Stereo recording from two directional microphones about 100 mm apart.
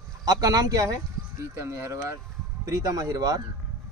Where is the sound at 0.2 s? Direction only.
40° right (ahead or behind).